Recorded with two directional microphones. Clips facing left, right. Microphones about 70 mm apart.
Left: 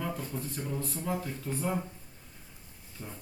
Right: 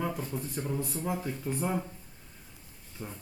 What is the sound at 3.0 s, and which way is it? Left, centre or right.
Speech, centre.